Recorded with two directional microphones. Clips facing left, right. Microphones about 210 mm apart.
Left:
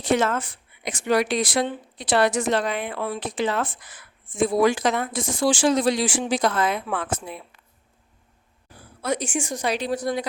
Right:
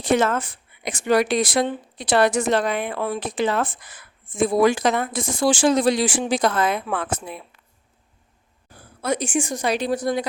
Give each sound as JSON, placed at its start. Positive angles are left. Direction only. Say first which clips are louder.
{"t": 0.0, "sound": "speech", "louder": "right 2 dB", "side_deg": -50}
{"t": 9.0, "sound": "speech", "louder": "right 3 dB", "side_deg": -50}